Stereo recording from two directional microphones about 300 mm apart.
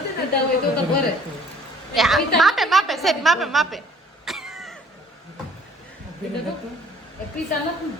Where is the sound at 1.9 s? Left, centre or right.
Centre.